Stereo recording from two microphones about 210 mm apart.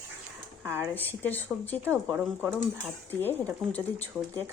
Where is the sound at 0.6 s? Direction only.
10° right (ahead or behind).